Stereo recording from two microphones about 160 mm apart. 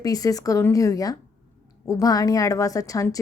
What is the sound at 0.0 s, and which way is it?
A woman's voice, 20° left (ahead or behind).